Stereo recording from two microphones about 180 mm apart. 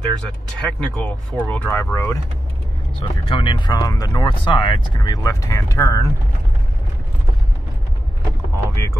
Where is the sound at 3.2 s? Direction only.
30° left (ahead or behind).